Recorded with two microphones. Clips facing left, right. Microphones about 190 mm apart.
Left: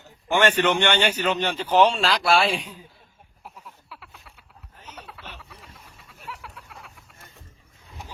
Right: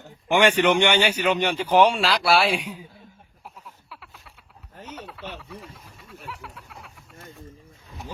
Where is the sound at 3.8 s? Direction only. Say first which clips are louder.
Even; centre (ahead or behind).